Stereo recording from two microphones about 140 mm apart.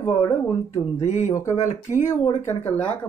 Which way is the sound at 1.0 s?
55° left (ahead or behind).